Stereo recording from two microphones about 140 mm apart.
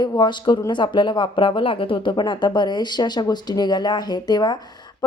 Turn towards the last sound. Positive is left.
turn(degrees=30)  # may be behind; listen again after turning